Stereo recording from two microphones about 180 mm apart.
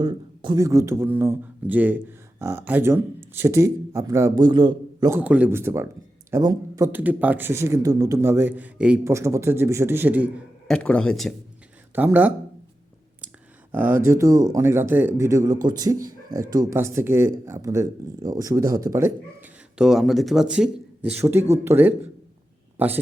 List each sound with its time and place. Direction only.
0.0 s speech: 20° right (ahead or behind)
10.7 s speech: 5° left (ahead or behind)
11.9 s speech: 10° right (ahead or behind)
13.7 s speech: 10° right (ahead or behind)
19.8 s speech: centre (ahead or behind)